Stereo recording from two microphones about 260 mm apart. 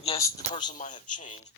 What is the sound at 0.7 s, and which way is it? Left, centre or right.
Speech, left.